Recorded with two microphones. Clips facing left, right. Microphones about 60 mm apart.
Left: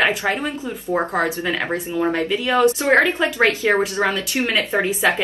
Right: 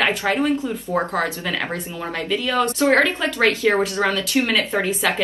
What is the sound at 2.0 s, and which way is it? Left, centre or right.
Speech, left.